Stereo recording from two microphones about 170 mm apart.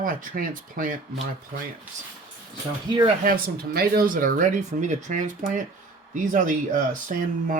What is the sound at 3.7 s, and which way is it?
Speech, 60° right (ahead or behind).